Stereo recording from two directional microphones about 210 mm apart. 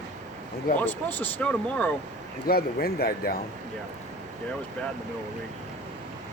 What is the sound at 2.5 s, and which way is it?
Speech, 45° left (ahead or behind).